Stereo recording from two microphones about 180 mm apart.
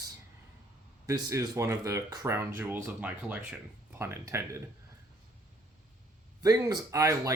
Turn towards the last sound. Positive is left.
turn(degrees=-20)  # may be behind; listen again after turning